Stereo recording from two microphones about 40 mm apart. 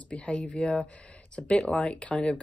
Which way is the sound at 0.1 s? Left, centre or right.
Left.